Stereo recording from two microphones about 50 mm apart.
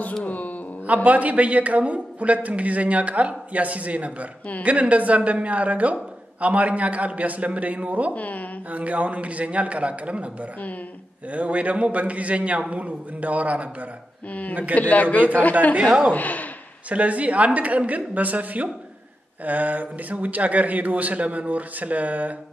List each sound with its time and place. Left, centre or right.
0.2 s speech: left
0.8 s a man's voice: right
8.1 s a man's voice: left
8.6 s a man's voice: right
14.8 s a man's voice: left
16.9 s a man's voice: right